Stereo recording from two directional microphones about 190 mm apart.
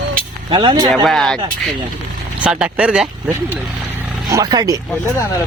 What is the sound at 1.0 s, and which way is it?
Speech, centre (ahead or behind).